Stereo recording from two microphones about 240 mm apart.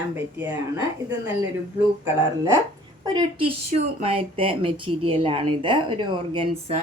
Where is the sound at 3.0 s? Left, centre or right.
Centre.